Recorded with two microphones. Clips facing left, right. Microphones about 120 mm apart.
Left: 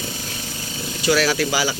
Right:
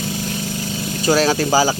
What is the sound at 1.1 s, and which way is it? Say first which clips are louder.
Speech: right 3 dB; 40° right (ahead or behind).